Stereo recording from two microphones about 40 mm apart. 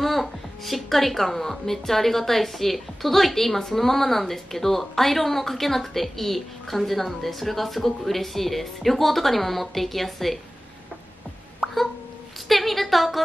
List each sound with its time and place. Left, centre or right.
0.0 s a woman's voice: centre
11.6 s hiccup: centre
12.4 s a sound: centre